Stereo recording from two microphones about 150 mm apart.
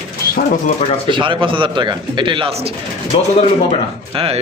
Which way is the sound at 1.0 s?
35° right (ahead or behind).